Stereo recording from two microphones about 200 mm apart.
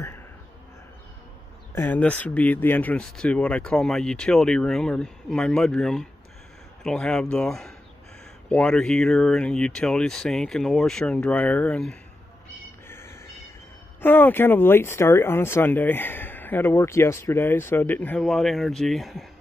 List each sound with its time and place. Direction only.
1.8 s speech: 10° left (ahead or behind)
12.8 s a sound: 10° left (ahead or behind)
14.0 s speech: 10° left (ahead or behind)